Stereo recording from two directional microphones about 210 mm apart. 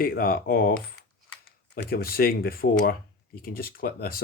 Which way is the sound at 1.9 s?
45° left (ahead or behind).